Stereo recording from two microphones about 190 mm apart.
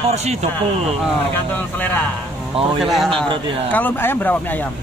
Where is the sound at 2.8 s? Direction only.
Centre (ahead or behind).